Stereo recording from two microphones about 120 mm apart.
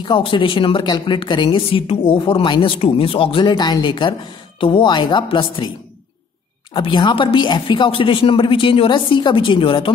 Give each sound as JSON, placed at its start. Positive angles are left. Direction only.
{"t": 0.0, "sound": "a woman's voice", "side_deg": 45}
{"t": 6.7, "sound": "a woman's voice", "side_deg": 40}